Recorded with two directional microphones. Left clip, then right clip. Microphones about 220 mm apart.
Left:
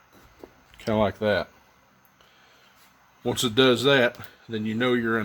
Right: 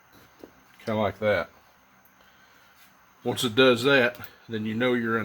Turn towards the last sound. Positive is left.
turn(degrees=35)  # may be behind; listen again after turning